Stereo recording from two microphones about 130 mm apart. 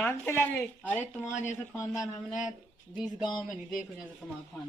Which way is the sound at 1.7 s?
25° left (ahead or behind).